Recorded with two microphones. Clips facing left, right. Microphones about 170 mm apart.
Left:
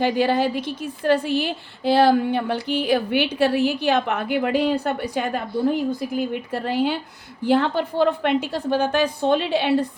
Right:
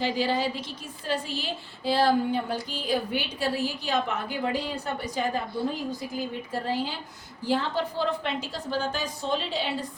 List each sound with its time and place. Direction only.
0.0 s a woman's voice: 60° left (ahead or behind)